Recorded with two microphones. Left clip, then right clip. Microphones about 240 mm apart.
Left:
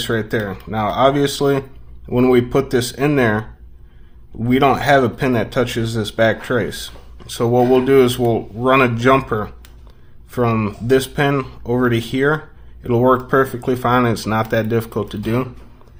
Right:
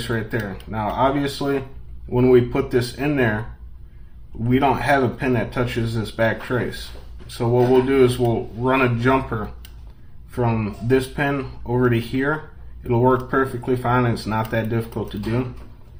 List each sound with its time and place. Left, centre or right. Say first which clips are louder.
0.0 s speech: left 6 dB; left
4.4 s speech: left 4 dB; left